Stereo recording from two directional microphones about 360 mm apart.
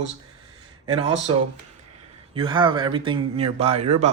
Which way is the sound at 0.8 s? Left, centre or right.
Centre.